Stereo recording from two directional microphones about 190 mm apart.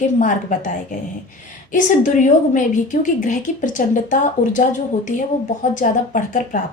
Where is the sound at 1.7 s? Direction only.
40° left (ahead or behind).